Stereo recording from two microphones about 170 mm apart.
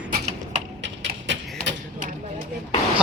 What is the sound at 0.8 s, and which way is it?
Typing, 90° right.